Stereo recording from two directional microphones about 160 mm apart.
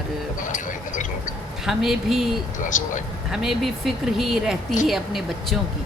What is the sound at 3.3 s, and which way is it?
Speech, centre (ahead or behind).